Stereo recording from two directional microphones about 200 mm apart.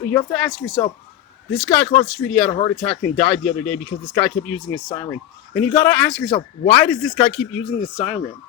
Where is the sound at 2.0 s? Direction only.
Centre (ahead or behind).